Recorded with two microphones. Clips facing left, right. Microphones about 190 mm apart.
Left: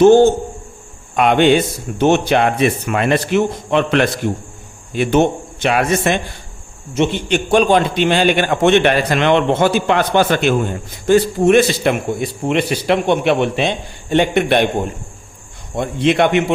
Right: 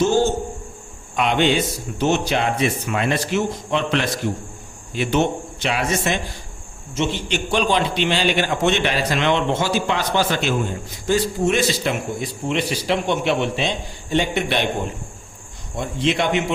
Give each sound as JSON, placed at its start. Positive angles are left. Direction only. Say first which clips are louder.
{"t": 0.0, "sound": "a man's voice", "louder": "left 9 dB", "side_deg": 60}
{"t": 15.7, "sound": "a man's voice", "louder": "left 6 dB", "side_deg": 60}